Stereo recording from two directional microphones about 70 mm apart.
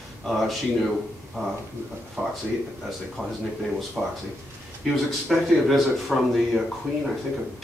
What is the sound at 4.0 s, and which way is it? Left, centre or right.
Speech, centre.